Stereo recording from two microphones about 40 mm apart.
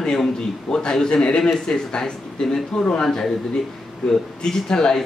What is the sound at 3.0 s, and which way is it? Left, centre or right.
A man's voice, centre.